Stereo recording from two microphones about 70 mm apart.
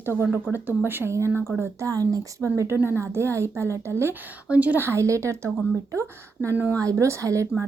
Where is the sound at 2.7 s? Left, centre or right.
Right.